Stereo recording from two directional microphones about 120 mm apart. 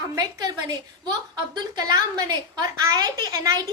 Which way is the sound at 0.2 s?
30° right (ahead or behind).